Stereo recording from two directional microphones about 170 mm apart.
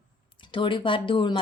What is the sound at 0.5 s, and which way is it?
Speech, 30° left (ahead or behind).